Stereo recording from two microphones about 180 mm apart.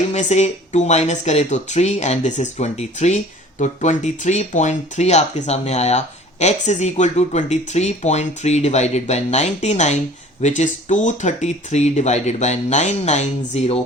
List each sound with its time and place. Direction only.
0.1 s speech: 40° left (ahead or behind)